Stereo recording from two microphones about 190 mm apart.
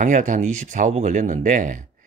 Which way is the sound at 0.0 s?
40° right (ahead or behind).